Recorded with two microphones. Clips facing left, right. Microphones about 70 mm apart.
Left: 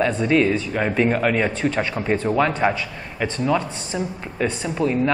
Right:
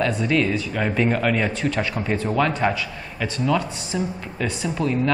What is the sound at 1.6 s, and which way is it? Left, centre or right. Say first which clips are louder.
A man's voice: left 2 dB; left.